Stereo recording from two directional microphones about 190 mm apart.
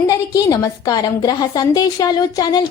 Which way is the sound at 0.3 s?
20° left (ahead or behind).